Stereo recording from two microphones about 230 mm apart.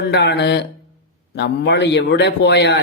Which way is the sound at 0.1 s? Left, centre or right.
Left.